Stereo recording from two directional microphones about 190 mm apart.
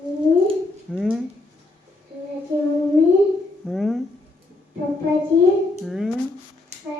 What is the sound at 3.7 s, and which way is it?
Speech, centre (ahead or behind).